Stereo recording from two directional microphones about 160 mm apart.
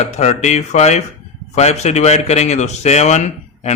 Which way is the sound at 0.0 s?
45° left (ahead or behind).